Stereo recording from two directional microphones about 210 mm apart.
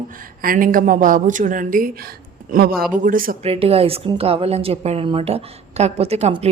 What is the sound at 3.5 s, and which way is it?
A woman's voice, 30° right (ahead or behind).